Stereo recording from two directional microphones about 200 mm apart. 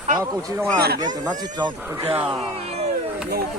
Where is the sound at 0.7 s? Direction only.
50° right (ahead or behind).